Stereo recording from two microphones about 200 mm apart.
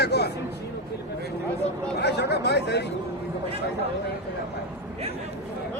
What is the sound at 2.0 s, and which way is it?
Speech, 55° left (ahead or behind).